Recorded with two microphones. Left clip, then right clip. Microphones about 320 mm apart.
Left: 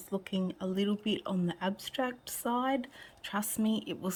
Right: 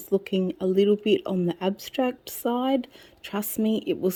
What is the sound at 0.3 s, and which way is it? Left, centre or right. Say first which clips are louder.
Speech: right 11 dB; centre.